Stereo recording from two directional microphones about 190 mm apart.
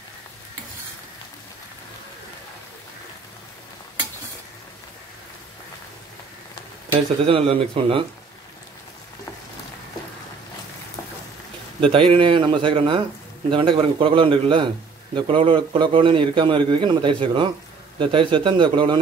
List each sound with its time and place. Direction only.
7.2 s a man's voice: 30° right (ahead or behind)
11.8 s a man's voice: 30° right (ahead or behind)